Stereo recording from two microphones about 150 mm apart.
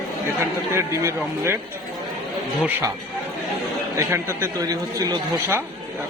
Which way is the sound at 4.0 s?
20° right (ahead or behind).